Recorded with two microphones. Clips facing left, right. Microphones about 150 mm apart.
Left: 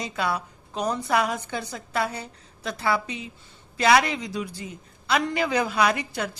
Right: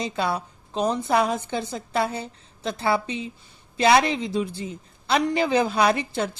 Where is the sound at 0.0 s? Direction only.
30° right (ahead or behind).